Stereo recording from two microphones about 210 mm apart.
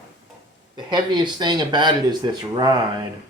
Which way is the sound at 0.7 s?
20° right (ahead or behind).